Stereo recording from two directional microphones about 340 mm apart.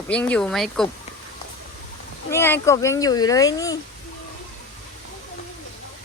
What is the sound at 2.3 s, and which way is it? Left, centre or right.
Speech, centre.